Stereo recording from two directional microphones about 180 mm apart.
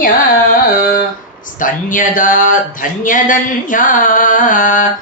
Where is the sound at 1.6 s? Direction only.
50° left (ahead or behind).